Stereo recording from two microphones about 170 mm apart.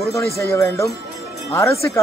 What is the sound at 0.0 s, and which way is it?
A man's voice, 20° left (ahead or behind).